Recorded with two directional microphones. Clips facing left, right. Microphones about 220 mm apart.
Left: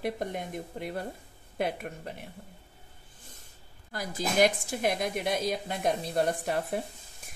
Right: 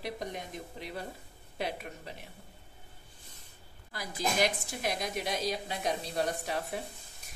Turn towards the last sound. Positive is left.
turn(degrees=50)  # may be behind; listen again after turning